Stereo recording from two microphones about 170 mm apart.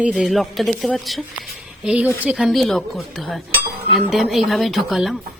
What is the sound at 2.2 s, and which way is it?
Speech, 5° right (ahead or behind).